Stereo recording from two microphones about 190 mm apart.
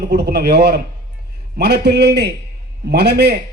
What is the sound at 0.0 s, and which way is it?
A man's voice, 60° right (ahead or behind).